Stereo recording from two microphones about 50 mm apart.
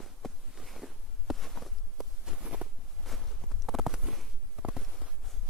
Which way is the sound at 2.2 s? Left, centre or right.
Centre.